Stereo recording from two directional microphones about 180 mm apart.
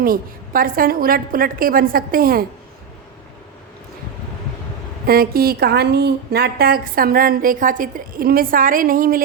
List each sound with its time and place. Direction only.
0.0 s a woman's voice: 55° right (ahead or behind)
5.0 s a woman's voice: 55° right (ahead or behind)